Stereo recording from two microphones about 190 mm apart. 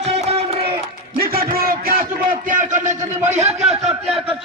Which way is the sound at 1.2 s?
50° right (ahead or behind).